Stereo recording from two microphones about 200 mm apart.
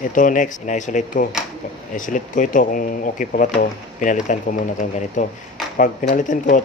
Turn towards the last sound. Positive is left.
turn(degrees=40)  # may be behind; listen again after turning